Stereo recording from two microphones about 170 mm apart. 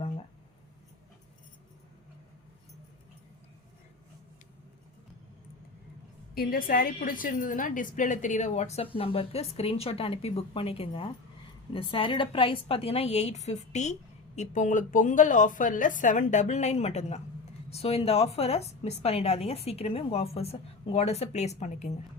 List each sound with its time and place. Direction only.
6.3 s a woman's voice: 60° left (ahead or behind); by 21.9 s 45° left (ahead or behind)